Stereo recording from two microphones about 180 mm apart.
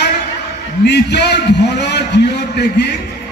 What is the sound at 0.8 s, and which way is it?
A man's voice, 70° left (ahead or behind).